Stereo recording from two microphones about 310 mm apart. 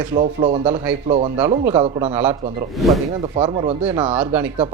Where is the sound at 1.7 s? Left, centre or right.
Centre.